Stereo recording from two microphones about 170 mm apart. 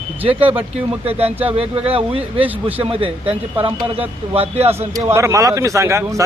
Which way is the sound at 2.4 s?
10° right (ahead or behind).